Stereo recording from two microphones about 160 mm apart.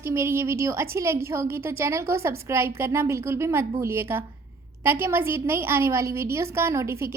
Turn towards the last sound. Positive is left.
turn(degrees=-15)  # may be behind; listen again after turning